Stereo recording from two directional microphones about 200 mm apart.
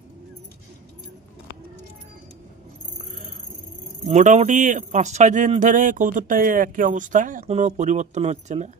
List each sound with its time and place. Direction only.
4.0 s speech: 35° right (ahead or behind)